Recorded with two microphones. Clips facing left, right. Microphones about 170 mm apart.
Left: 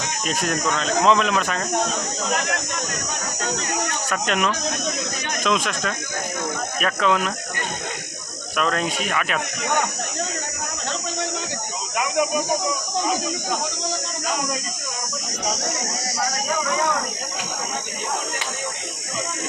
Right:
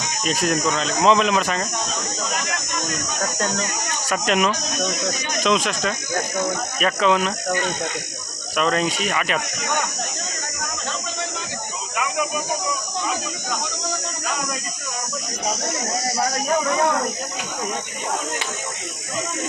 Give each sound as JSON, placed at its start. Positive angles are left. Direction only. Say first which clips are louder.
{"t": 0.3, "sound": "speech", "louder": "right 3 dB", "side_deg": 0}
{"t": 3.5, "sound": "speech", "louder": "left 1 dB", "side_deg": 60}
{"t": 4.1, "sound": "speech", "louder": "right 4 dB", "side_deg": -5}
{"t": 8.5, "sound": "speech", "louder": "right 2 dB", "side_deg": 0}